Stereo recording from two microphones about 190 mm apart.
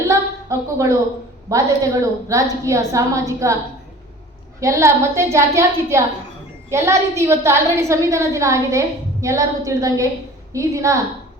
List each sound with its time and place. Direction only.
0.1 s a sound: 15° right (ahead or behind)
1.5 s a woman's voice: 15° right (ahead or behind)
4.6 s a woman's voice: 15° right (ahead or behind)